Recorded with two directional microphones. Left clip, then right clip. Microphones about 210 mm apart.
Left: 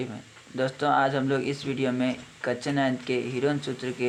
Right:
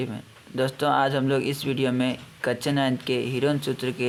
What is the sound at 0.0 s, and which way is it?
Speech, 25° right (ahead or behind).